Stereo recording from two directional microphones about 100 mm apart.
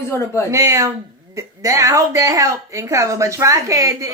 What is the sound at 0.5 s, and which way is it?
Speech, 30° right (ahead or behind).